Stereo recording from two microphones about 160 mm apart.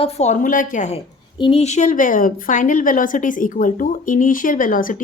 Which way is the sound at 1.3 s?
35° left (ahead or behind).